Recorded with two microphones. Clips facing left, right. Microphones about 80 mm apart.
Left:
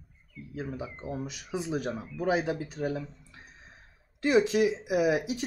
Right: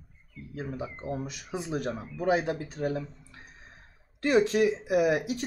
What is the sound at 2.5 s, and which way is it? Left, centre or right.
Speech, right.